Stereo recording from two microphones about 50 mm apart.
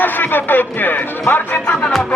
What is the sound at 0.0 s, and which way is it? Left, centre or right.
Speech, left.